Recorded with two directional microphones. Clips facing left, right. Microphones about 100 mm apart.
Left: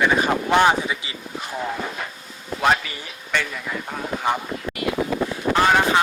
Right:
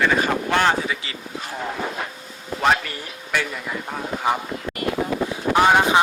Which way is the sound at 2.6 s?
Centre (ahead or behind).